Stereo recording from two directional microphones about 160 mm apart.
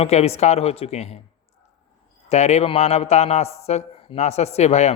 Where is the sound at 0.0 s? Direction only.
40° left (ahead or behind).